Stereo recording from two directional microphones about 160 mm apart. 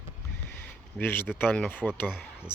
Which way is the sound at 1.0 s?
10° left (ahead or behind).